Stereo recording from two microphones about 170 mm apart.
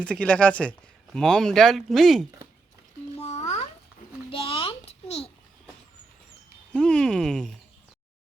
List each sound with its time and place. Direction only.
0.0 s speech: 5° left (ahead or behind)
3.2 s a sound: 40° left (ahead or behind)
6.7 s speech: 5° left (ahead or behind)